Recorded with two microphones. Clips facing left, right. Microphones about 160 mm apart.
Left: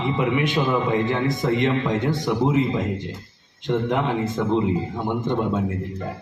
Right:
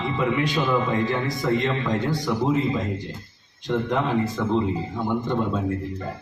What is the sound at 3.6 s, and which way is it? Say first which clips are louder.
Speech: left 2 dB; 20° left (ahead or behind).